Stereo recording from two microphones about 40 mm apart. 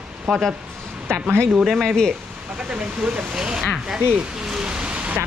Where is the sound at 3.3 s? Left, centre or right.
Centre.